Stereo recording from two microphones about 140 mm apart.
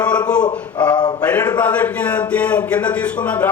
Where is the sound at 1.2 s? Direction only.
10° left (ahead or behind).